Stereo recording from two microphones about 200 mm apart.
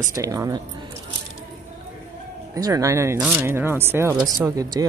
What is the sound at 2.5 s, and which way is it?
Speech, 15° right (ahead or behind).